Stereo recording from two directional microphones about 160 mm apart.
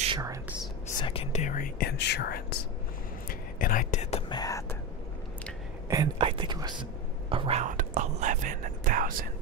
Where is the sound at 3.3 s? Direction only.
60° left (ahead or behind); by 4.2 s 45° left (ahead or behind).